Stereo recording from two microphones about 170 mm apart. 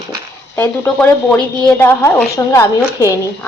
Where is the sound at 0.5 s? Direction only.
10° left (ahead or behind).